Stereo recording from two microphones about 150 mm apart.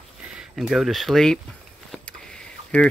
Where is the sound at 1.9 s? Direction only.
5° left (ahead or behind).